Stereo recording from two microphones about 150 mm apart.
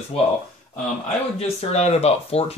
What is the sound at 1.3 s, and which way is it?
Speech, 45° left (ahead or behind).